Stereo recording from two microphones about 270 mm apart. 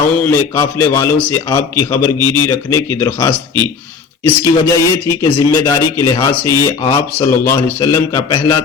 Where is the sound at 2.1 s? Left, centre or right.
Centre.